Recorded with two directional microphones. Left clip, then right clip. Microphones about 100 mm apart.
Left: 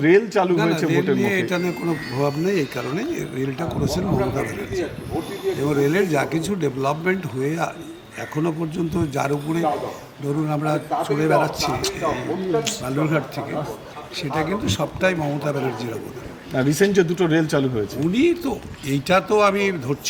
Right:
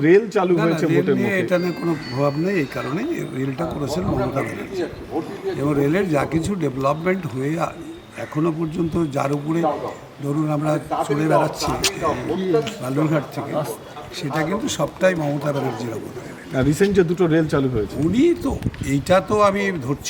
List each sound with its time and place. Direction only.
0.0 s speech: 15° left (ahead or behind)
0.5 s a man's voice: 5° right (ahead or behind)
16.6 s speech: 20° left (ahead or behind)
18.0 s a man's voice: 10° right (ahead or behind)